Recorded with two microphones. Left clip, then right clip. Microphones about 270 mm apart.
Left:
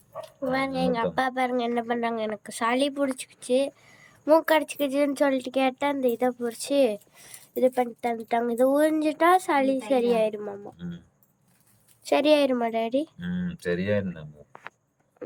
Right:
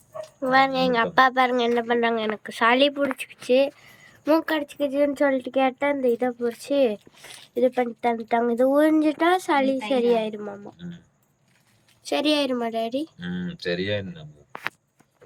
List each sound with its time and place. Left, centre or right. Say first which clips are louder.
0.4 s a woman's voice: right 7 dB; centre
10.8 s speech: left 1 dB; left
12.0 s speech: left 2 dB; centre; by 14.3 s left